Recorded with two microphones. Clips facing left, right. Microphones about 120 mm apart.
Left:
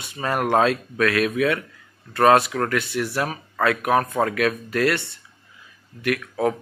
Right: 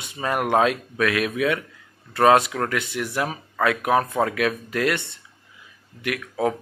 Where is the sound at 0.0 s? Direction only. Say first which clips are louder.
Left 1 dB; 20° right (ahead or behind).